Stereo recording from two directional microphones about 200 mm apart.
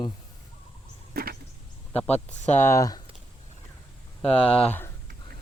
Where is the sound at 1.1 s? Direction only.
50° right (ahead or behind).